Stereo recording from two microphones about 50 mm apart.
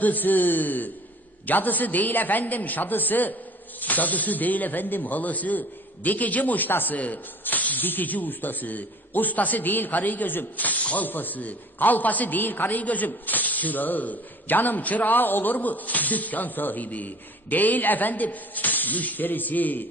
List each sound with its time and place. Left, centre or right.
0.0 s speech: left